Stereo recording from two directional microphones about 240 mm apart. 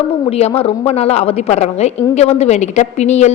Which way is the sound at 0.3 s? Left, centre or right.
Left.